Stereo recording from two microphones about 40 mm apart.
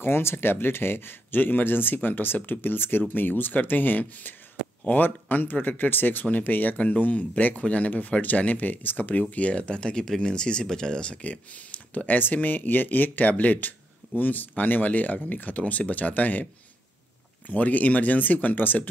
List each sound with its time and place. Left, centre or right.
0.0 s speech: left
9.3 s speech: left
11.2 s speech: left
17.5 s speech: left